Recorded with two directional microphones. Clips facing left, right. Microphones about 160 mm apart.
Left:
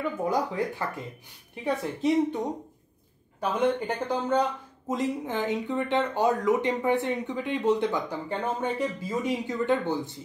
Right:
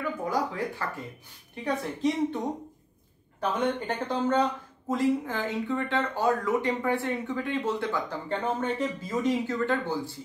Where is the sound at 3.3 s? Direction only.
10° left (ahead or behind).